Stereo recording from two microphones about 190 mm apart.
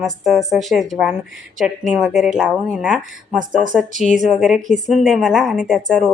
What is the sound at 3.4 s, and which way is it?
Speech, 45° right (ahead or behind).